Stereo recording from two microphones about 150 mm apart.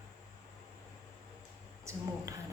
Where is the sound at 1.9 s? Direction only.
20° right (ahead or behind).